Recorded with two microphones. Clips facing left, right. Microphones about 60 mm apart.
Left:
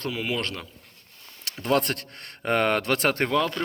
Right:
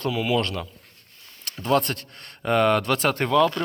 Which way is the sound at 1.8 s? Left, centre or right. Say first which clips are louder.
Right 1 dB; left.